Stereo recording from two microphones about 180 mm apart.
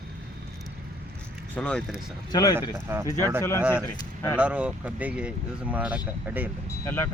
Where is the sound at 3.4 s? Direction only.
15° left (ahead or behind).